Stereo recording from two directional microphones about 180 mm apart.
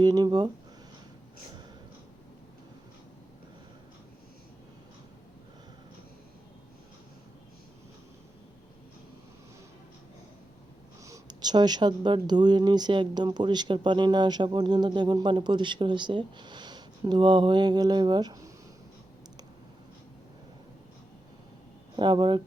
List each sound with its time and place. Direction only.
0.0 s speech: 20° right (ahead or behind)
11.0 s speech: 20° right (ahead or behind)
21.9 s speech: 25° right (ahead or behind)